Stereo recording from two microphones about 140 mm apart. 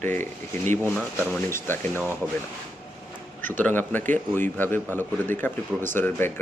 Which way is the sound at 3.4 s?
15° left (ahead or behind).